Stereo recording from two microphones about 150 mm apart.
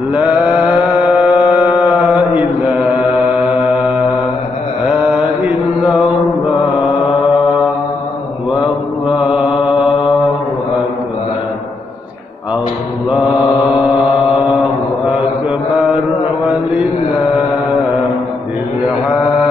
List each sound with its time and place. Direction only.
0.1 s mantra: 10° right (ahead or behind)
4.8 s mantra: 10° right (ahead or behind)
9.0 s mantra: 5° right (ahead or behind)